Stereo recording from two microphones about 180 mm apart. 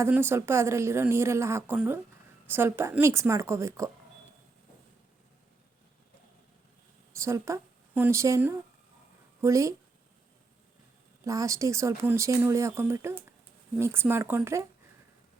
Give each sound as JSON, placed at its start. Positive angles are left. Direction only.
{"t": 0.0, "sound": "speech", "side_deg": -15}
{"t": 7.2, "sound": "a woman's voice", "side_deg": -15}
{"t": 11.3, "sound": "speech", "side_deg": -20}